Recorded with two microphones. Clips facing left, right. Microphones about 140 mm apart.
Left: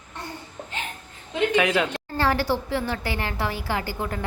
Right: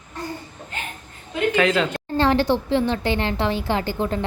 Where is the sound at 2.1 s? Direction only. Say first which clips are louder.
Right 5 dB; 20° right (ahead or behind).